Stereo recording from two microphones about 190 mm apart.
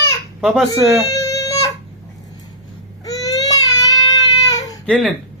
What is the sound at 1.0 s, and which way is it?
Baby cry, 15° left (ahead or behind).